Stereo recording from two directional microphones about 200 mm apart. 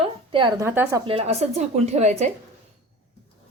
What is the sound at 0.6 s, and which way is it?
Speech, 10° right (ahead or behind).